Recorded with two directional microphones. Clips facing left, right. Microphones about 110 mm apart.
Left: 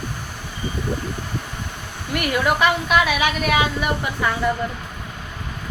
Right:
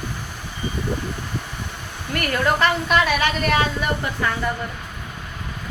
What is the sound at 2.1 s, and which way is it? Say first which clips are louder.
A woman's voice: left 1 dB; 10° left (ahead or behind).